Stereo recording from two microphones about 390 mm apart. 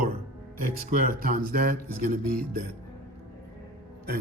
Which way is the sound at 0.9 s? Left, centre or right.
Right.